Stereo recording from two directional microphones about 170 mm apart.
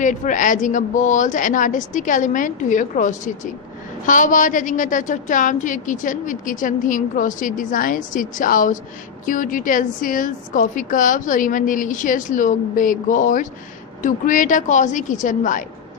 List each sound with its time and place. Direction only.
0.0 s a woman's voice: 50° left (ahead or behind)